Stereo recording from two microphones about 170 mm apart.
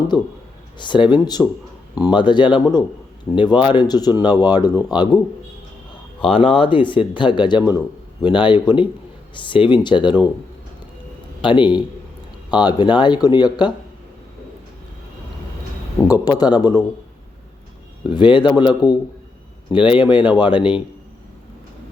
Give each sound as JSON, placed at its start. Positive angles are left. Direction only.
{"t": 0.1, "sound": "speech", "side_deg": 25}
{"t": 6.2, "sound": "speech", "side_deg": 30}
{"t": 11.4, "sound": "speech", "side_deg": 30}
{"t": 16.0, "sound": "speech", "side_deg": 20}
{"t": 18.0, "sound": "speech", "side_deg": 25}